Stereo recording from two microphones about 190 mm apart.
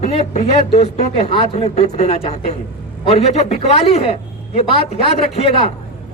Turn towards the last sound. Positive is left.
turn(degrees=35)  # may be behind; listen again after turning